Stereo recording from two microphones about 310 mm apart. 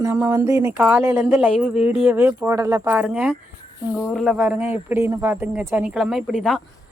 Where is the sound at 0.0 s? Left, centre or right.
Centre.